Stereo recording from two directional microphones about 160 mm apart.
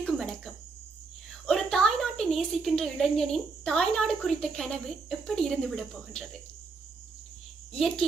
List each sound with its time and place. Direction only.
0.0 s cricket: 5° left (ahead or behind)
1.3 s a woman's voice: centre (ahead or behind)
7.7 s a child's voice: 5° left (ahead or behind)